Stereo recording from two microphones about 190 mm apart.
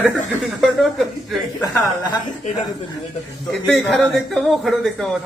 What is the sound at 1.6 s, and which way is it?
Speech, 20° left (ahead or behind).